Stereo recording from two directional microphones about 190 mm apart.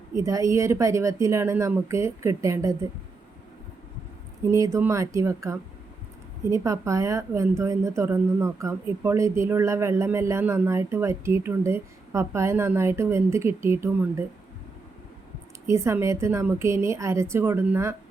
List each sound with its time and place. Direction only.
0.2 s a woman's voice: 15° right (ahead or behind)
4.5 s a woman's voice: 15° right (ahead or behind)
15.6 s a woman's voice: 15° right (ahead or behind)